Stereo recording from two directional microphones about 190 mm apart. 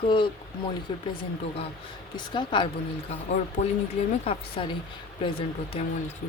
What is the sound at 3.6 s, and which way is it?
Speech, 35° left (ahead or behind).